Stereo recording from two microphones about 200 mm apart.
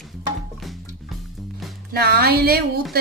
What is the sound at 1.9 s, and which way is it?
Speech, 50° right (ahead or behind).